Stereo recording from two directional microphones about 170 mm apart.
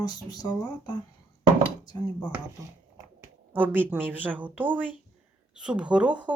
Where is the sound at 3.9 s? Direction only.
10° right (ahead or behind).